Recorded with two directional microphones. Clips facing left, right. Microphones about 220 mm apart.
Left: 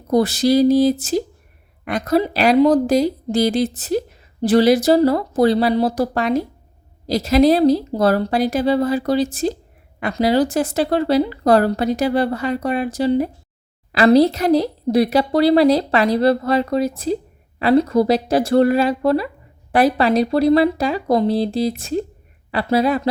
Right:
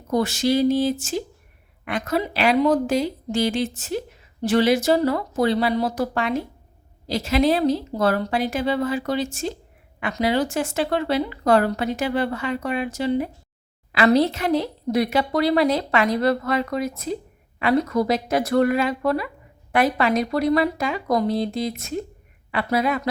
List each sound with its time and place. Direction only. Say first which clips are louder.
0.1 s a woman's voice: left 5 dB; 35° left (ahead or behind)